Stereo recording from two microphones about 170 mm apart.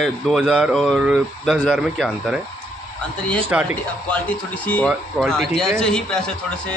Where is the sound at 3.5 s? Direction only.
10° right (ahead or behind).